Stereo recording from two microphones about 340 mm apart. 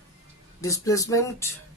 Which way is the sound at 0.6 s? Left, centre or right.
Centre.